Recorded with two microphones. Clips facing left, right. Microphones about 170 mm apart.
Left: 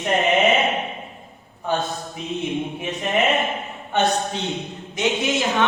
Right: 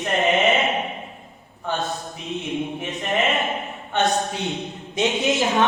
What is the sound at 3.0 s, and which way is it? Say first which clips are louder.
Speech: left 2 dB; 20° left (ahead or behind).